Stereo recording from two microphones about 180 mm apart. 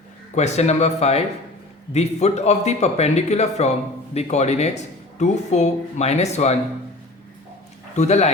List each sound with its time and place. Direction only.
0.3 s speech: 40° left (ahead or behind)
7.9 s speech: 40° left (ahead or behind)